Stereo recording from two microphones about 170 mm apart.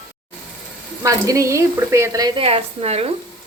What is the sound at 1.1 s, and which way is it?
Speech, 20° right (ahead or behind).